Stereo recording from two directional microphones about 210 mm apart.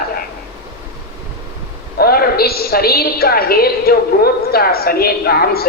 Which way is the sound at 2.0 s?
45° left (ahead or behind).